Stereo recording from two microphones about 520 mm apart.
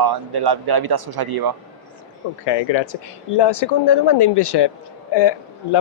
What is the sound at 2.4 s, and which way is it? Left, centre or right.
Speech, left.